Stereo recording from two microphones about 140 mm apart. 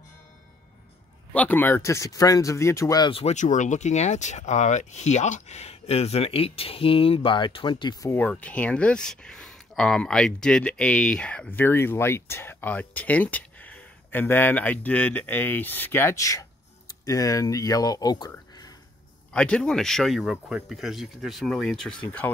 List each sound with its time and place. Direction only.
1.3 s speech: 10° left (ahead or behind)
3.1 s speech: 40° left (ahead or behind)
3.3 s speech: 60° left (ahead or behind); by 8.2 s 25° left (ahead or behind)
8.2 s speech: 10° left (ahead or behind); by 18.3 s 30° left (ahead or behind)
19.3 s speech: 5° left (ahead or behind)